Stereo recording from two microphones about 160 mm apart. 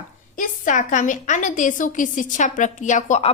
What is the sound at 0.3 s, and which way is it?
A woman's voice, 55° left (ahead or behind).